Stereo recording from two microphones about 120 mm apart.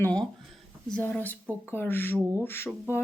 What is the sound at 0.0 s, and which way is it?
A woman's voice, 10° left (ahead or behind).